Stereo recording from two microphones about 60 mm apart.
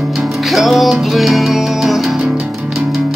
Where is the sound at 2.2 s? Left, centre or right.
Centre.